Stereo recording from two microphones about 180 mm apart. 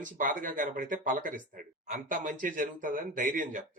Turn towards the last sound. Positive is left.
turn(degrees=-45)  # may be behind; listen again after turning